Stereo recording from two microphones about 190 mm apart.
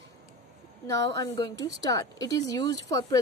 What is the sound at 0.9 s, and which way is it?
Speech, 20° left (ahead or behind).